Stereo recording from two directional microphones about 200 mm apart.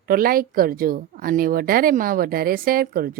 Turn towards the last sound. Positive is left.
turn(degrees=-50)  # may be behind; listen again after turning